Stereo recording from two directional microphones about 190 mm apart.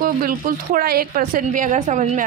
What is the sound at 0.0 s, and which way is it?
Speech, 50° right (ahead or behind).